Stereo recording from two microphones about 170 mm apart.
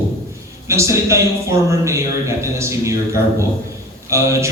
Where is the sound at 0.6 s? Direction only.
15° right (ahead or behind).